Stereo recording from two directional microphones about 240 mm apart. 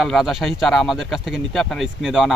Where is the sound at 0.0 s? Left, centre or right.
Centre.